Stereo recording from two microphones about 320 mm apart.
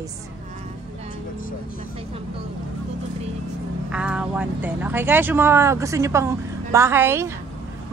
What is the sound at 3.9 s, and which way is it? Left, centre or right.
Speech, centre.